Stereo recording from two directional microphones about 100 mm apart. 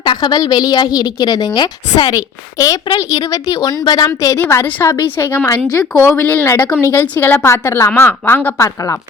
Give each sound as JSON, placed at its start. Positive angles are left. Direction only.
{"t": 0.0, "sound": "a woman's voice", "side_deg": 45}
{"t": 2.1, "sound": "a woman's voice", "side_deg": 35}
{"t": 6.5, "sound": "a woman's voice", "side_deg": 30}